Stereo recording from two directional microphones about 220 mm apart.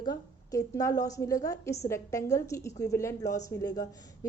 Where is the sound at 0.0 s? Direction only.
15° left (ahead or behind).